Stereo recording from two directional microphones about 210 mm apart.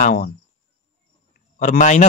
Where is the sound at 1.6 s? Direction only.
35° left (ahead or behind).